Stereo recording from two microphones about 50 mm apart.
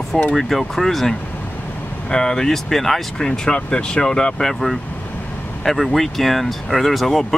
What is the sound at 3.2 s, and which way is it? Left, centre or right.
Speech, centre.